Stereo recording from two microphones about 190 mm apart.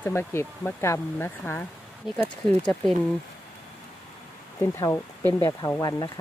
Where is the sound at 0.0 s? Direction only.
10° left (ahead or behind).